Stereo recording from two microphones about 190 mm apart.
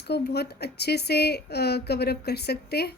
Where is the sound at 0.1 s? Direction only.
60° left (ahead or behind).